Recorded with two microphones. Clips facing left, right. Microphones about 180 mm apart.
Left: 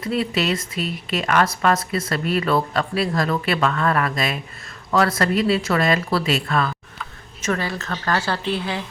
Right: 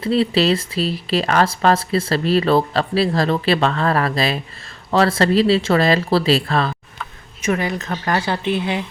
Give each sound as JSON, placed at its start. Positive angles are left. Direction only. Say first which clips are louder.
{"t": 0.0, "sound": "speech", "louder": "right 5 dB", "side_deg": -30}
{"t": 7.4, "sound": "speech", "louder": "right 4 dB", "side_deg": -15}